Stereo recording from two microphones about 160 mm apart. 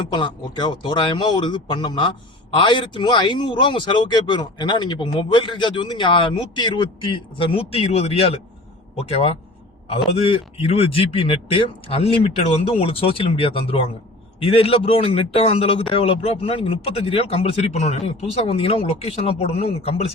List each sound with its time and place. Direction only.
0.1 s a man's voice: 30° left (ahead or behind)